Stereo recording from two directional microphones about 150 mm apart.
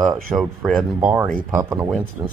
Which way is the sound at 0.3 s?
10° right (ahead or behind).